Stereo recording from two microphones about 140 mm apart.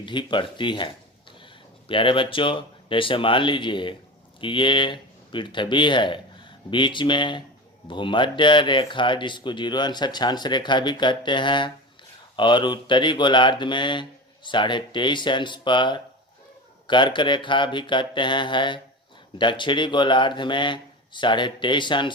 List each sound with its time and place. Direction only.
0.0 s speech: 35° left (ahead or behind)